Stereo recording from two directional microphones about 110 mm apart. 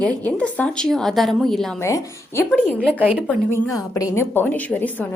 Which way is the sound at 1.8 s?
25° left (ahead or behind).